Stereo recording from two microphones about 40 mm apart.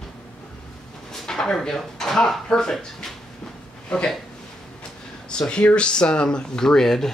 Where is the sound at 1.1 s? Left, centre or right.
Centre.